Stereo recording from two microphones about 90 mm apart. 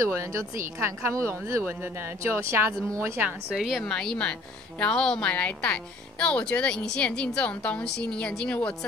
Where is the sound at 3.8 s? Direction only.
10° left (ahead or behind).